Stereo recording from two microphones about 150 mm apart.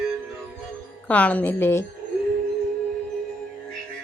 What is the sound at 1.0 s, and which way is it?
Speech, 10° left (ahead or behind).